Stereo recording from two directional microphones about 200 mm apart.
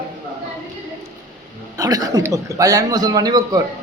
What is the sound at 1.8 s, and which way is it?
Speech, 20° right (ahead or behind).